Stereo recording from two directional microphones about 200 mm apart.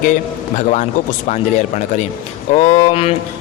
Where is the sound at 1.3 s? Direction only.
35° left (ahead or behind).